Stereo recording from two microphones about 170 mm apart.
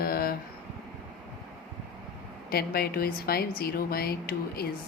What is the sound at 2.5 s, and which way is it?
A woman's voice, 65° left (ahead or behind).